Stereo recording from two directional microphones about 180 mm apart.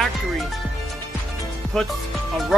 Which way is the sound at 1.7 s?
Centre (ahead or behind).